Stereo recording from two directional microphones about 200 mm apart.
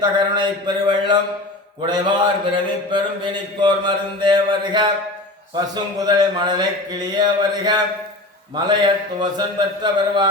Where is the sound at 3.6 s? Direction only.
25° right (ahead or behind).